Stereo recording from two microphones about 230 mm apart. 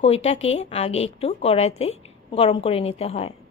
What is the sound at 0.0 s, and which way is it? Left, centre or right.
A woman's voice, left.